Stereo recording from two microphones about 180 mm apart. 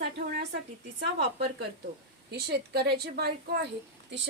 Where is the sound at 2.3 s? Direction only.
60° right (ahead or behind).